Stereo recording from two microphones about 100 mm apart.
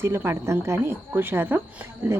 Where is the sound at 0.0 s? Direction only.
25° right (ahead or behind).